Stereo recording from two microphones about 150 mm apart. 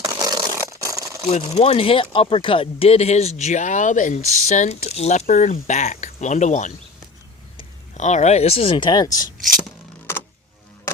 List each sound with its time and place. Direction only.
0.0 s a sound: 25° right (ahead or behind)
1.3 s speech: 40° left (ahead or behind)
5.2 s speech: 60° left (ahead or behind)
7.9 s speech: 50° left (ahead or behind); by 9.2 s 25° left (ahead or behind)